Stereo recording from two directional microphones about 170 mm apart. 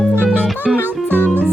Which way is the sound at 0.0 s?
5° left (ahead or behind).